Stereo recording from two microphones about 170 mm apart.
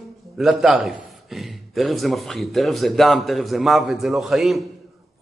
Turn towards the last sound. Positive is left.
turn(degrees=0)  # may be behind; listen again after turning